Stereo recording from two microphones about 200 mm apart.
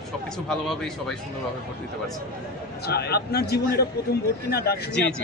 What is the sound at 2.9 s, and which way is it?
Speech, 50° left (ahead or behind).